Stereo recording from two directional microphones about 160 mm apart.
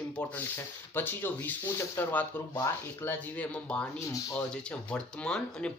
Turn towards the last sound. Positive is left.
turn(degrees=5)  # may be behind; listen again after turning